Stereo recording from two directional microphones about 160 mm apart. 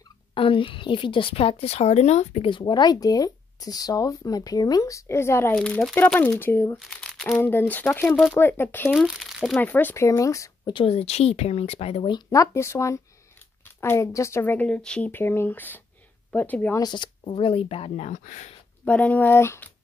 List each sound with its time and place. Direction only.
0.3 s speech: 35° left (ahead or behind)
2.5 s speech: 25° left (ahead or behind)
5.6 s speech: 5° left (ahead or behind)
6.9 s speech: 5° left (ahead or behind)
8.9 s speech: centre (ahead or behind)
9.6 s speech: 10° left (ahead or behind)
10.7 s speech: 35° left (ahead or behind)
12.3 s speech: 20° left (ahead or behind)
16.7 s speech: 25° left (ahead or behind); by 18.5 s 50° left (ahead or behind)
18.9 s speech: 10° left (ahead or behind)